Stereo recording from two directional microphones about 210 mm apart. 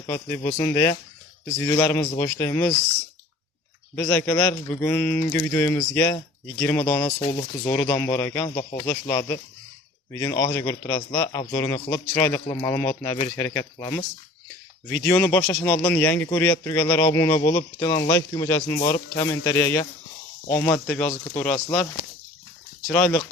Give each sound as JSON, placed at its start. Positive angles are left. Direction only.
{"t": 0.1, "sound": "a man's voice", "side_deg": 15}
{"t": 3.9, "sound": "a man's voice", "side_deg": 10}
{"t": 7.2, "sound": "speech", "side_deg": 25}
{"t": 7.9, "sound": "a man's voice", "side_deg": 10}
{"t": 22.9, "sound": "speech", "side_deg": 5}